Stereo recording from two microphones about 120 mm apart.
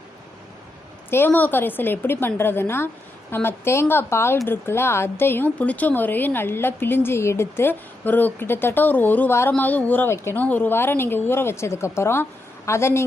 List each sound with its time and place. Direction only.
1.1 s a woman's voice: 15° left (ahead or behind)